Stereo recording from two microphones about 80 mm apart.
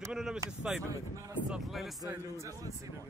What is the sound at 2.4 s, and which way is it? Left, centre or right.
Speech, right.